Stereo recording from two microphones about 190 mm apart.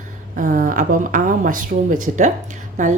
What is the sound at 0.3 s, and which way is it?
A woman's voice, 45° right (ahead or behind).